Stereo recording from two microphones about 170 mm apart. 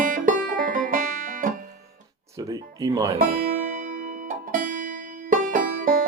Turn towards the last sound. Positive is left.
turn(degrees=-50)  # may be behind; listen again after turning